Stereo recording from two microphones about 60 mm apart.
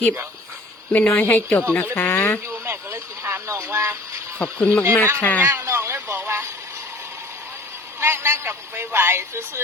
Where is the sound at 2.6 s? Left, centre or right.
Right.